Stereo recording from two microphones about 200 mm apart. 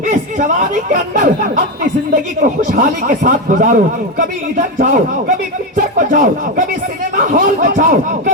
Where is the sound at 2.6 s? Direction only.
40° right (ahead or behind).